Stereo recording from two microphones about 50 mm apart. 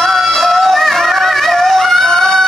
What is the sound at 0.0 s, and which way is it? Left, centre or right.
Music, centre.